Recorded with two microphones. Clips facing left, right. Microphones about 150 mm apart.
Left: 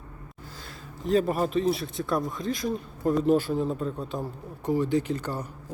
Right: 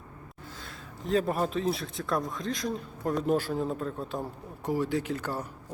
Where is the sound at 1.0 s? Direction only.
Centre (ahead or behind).